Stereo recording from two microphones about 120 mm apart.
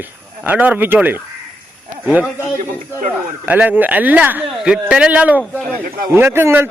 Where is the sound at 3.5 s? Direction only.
15° right (ahead or behind).